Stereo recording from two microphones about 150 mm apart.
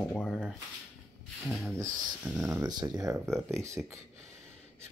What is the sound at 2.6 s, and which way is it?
Speech, 25° right (ahead or behind).